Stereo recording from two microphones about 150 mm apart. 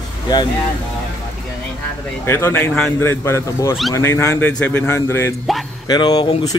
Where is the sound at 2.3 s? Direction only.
15° left (ahead or behind).